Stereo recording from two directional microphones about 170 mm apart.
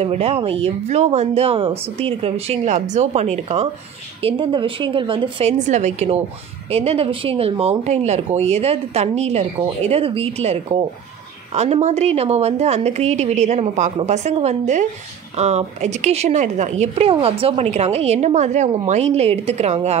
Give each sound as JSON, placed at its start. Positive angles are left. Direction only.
{"t": 0.0, "sound": "speech", "side_deg": -35}